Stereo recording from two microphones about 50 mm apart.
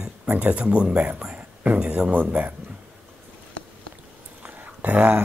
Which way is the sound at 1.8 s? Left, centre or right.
Right.